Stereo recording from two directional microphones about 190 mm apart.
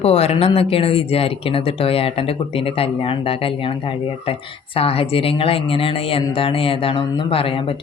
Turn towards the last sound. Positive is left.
turn(degrees=30)  # may be behind; listen again after turning